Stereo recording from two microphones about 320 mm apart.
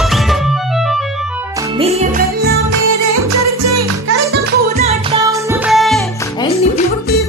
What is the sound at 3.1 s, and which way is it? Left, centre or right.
Music, right.